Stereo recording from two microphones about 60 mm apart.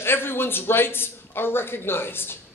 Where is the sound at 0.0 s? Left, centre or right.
Left.